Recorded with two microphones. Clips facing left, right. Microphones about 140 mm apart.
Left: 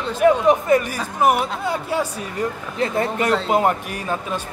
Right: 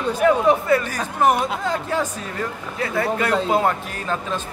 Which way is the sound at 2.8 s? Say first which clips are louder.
Left 1 dB; 25° left (ahead or behind).